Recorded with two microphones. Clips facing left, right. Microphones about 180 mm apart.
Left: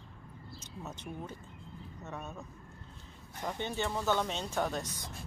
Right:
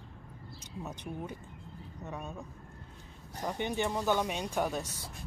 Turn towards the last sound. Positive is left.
turn(degrees=-10)  # may be behind; listen again after turning